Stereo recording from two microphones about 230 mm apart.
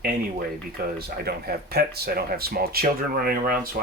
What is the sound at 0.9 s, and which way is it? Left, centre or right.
Speech, right.